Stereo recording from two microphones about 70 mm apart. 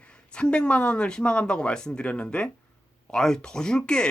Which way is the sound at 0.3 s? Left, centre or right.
Centre.